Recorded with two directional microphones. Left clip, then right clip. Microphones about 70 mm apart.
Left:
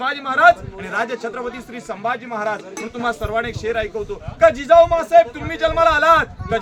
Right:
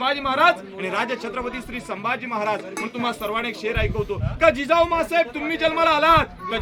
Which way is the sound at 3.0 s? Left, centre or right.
Left.